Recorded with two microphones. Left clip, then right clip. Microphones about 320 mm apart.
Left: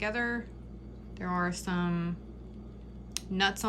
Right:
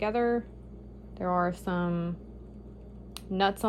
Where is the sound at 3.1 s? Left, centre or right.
Centre.